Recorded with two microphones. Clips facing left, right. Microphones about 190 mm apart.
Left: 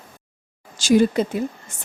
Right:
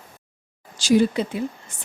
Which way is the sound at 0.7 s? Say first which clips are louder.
Left 2 dB; 50° left (ahead or behind).